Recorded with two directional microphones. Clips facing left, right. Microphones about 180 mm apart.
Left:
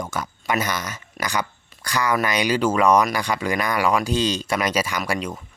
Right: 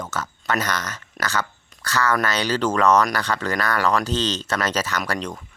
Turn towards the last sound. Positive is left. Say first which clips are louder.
# left 1 dB
turn(degrees=10)  # may be behind; listen again after turning